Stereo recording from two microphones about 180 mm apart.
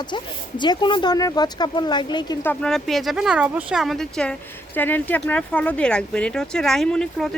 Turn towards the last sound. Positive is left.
turn(degrees=5)  # may be behind; listen again after turning